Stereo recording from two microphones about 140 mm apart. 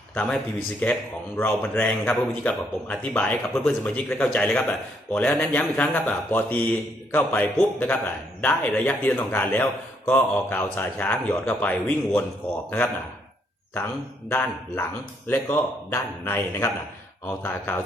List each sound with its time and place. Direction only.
0.1 s a man's voice: 10° left (ahead or behind)
13.7 s a man's voice: 15° left (ahead or behind)